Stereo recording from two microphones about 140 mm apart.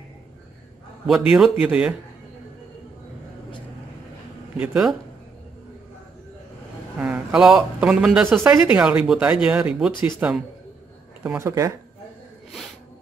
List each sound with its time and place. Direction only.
1.0 s speech: centre (ahead or behind)
4.6 s speech: 5° right (ahead or behind)
7.0 s speech: 15° right (ahead or behind)